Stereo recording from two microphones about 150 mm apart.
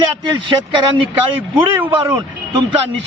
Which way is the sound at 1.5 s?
10° right (ahead or behind).